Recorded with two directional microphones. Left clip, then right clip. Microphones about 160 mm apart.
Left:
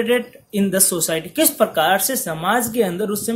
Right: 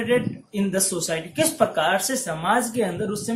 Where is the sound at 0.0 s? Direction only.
50° left (ahead or behind).